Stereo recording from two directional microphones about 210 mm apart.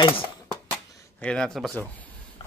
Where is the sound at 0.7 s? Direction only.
5° left (ahead or behind).